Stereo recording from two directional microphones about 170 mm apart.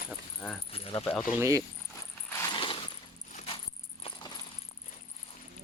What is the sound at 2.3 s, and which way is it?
Mechanisms, 20° left (ahead or behind).